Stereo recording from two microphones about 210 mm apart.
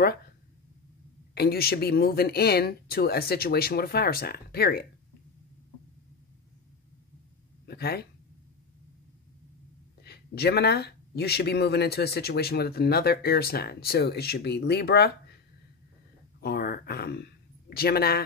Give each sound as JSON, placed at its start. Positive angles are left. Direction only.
{"t": 1.3, "sound": "speech", "side_deg": 50}
{"t": 7.6, "sound": "speech", "side_deg": 50}
{"t": 10.0, "sound": "speech", "side_deg": 50}
{"t": 16.3, "sound": "speech", "side_deg": 45}